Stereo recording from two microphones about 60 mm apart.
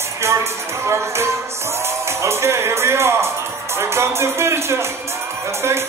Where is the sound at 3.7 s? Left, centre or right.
Right.